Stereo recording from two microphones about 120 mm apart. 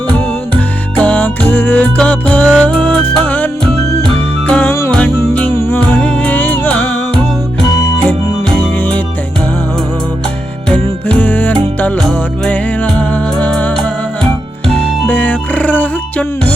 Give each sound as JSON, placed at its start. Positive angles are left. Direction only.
{"t": 0.1, "sound": "music", "side_deg": 10}
{"t": 8.0, "sound": "organ", "side_deg": 10}
{"t": 10.7, "sound": "music", "side_deg": 10}